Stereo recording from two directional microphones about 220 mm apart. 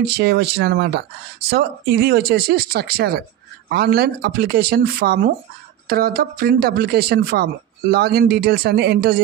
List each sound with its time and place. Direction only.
0.0 s speech: 45° right (ahead or behind)